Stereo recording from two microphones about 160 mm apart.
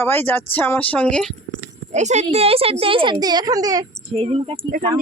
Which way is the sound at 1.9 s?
45° right (ahead or behind).